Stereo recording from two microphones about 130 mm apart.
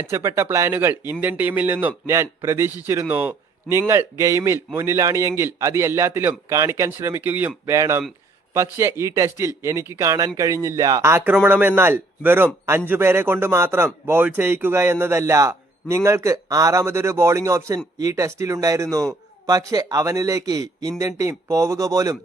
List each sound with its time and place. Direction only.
0.1 s a man's voice: 20° right (ahead or behind)